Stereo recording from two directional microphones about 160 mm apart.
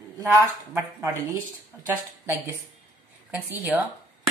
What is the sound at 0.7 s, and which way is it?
Speech, 15° right (ahead or behind).